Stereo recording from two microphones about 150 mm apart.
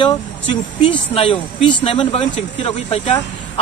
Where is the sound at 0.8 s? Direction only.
35° left (ahead or behind).